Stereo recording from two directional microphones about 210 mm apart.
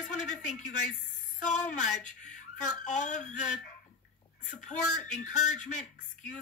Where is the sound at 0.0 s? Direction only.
35° left (ahead or behind).